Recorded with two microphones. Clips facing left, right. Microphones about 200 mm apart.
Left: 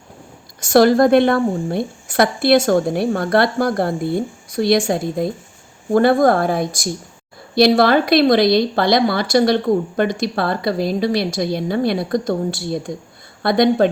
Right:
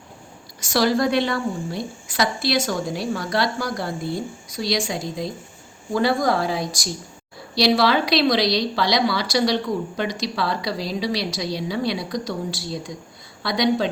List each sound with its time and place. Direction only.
0.6 s a woman's voice: 50° left (ahead or behind)